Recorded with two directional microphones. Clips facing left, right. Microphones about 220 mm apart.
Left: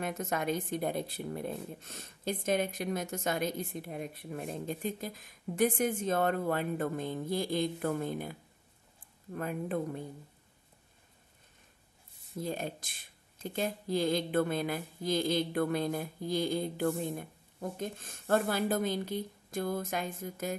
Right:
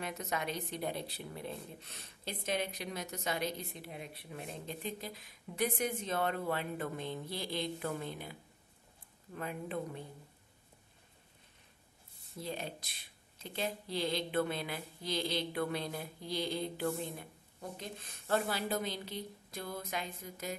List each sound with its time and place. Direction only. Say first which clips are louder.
0.0 s speech: left 5 dB; 50° left (ahead or behind)
12.4 s speech: left 5 dB; 50° left (ahead or behind)